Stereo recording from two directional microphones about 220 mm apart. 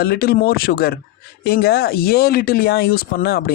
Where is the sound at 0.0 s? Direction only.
45° left (ahead or behind).